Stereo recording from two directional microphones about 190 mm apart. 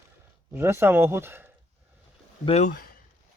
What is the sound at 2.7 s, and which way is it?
Speech, 50° left (ahead or behind).